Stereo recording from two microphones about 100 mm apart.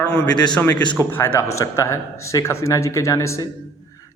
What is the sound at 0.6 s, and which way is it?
A man's voice, 20° left (ahead or behind).